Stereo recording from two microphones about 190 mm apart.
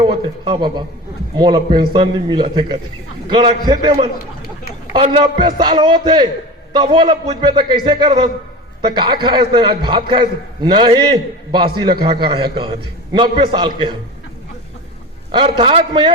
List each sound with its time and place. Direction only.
0.0 s a man's voice: 25° right (ahead or behind)
15.3 s a man's voice: 25° right (ahead or behind)